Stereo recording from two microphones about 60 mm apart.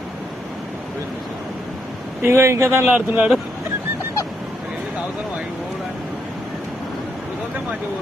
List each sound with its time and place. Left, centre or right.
2.2 s speech: right
2.9 s speech: right